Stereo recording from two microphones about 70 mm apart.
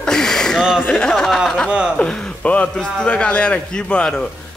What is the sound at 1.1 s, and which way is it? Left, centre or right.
Speech, centre.